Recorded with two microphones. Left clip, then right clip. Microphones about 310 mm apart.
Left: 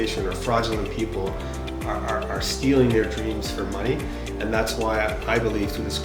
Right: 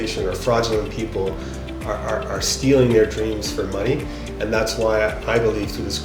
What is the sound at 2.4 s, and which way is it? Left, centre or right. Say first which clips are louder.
Speech: right 7 dB; right.